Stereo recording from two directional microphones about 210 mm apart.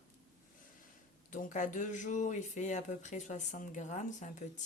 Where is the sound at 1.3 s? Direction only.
40° left (ahead or behind).